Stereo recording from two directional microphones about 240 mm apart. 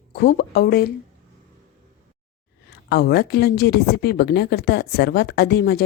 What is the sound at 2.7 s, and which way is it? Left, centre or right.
A woman's voice, left.